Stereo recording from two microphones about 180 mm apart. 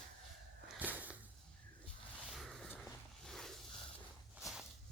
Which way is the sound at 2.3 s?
Centre (ahead or behind).